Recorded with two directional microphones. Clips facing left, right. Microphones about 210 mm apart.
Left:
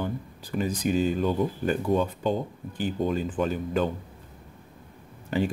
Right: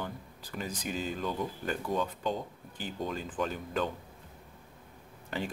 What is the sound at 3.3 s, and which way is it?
Speech, 5° left (ahead or behind).